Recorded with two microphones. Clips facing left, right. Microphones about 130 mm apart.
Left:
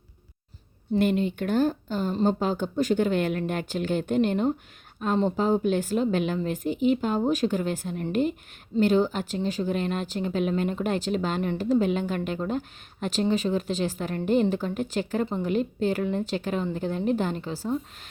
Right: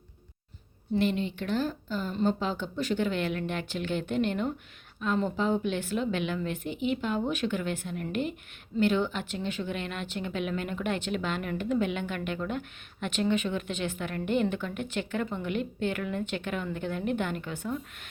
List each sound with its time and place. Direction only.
0.9 s speech: 45° left (ahead or behind)